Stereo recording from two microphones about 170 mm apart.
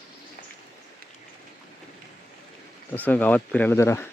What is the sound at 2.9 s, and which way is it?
Speech, 10° left (ahead or behind).